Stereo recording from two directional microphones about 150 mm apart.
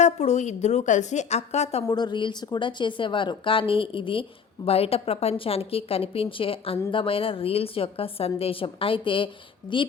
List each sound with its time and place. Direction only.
0.0 s a woman's voice: 50° left (ahead or behind)
1.9 s a woman's voice: 30° left (ahead or behind)